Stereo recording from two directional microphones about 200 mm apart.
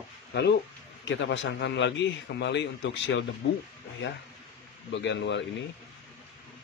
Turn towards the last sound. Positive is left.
turn(degrees=60)  # may be behind; listen again after turning